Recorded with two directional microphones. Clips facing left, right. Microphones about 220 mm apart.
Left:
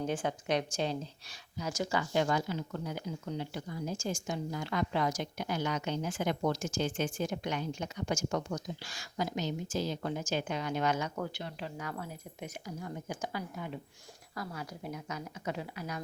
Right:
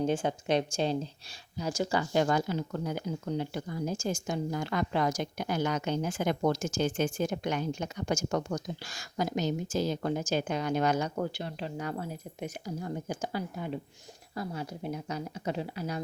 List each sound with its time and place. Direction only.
0.0 s speech: 25° right (ahead or behind)